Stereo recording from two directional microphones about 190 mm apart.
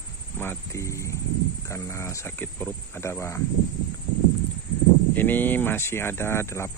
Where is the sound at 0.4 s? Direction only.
15° left (ahead or behind).